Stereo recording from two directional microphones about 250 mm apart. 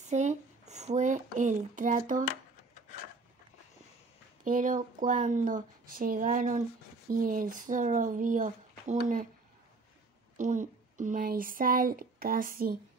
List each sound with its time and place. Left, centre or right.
0.0 s a sound: right
4.5 s speech: right
10.3 s speech: right